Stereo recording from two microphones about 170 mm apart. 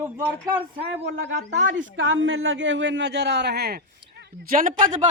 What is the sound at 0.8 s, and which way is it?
Speech, 70° right (ahead or behind).